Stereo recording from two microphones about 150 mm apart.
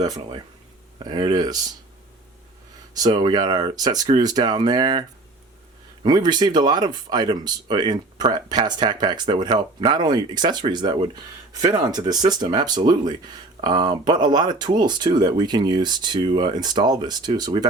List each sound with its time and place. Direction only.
0.0 s speech: 30° right (ahead or behind)
2.9 s speech: 30° right (ahead or behind)